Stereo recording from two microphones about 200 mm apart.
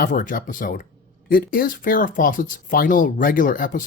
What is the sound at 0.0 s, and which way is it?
Speech, 40° left (ahead or behind).